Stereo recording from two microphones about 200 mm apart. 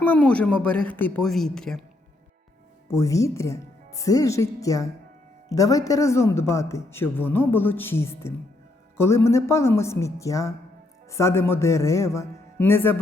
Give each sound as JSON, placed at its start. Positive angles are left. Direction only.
{"t": 0.0, "sound": "speech", "side_deg": 10}
{"t": 2.9, "sound": "speech", "side_deg": 15}